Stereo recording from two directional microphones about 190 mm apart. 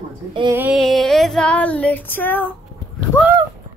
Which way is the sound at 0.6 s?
5° right (ahead or behind).